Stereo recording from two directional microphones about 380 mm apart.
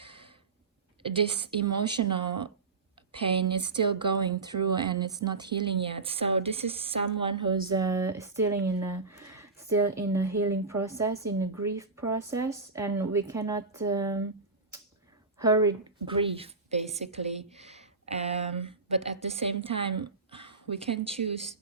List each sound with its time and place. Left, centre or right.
0.0 s a sound: centre
1.0 s speech: centre
15.4 s a woman's voice: centre